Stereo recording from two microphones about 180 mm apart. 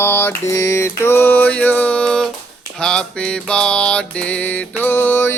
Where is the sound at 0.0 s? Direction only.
10° left (ahead or behind).